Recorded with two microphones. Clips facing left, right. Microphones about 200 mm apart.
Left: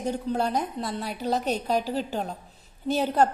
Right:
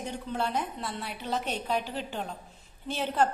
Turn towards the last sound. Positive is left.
turn(degrees=40)  # may be behind; listen again after turning